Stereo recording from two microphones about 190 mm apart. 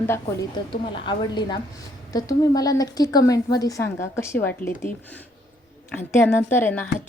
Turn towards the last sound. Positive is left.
turn(degrees=10)  # may be behind; listen again after turning